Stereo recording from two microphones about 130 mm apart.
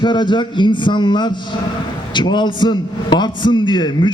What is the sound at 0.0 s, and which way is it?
A man's voice, 35° left (ahead or behind).